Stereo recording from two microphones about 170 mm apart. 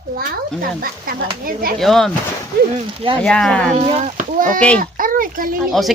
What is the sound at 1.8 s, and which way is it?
Speech, centre (ahead or behind).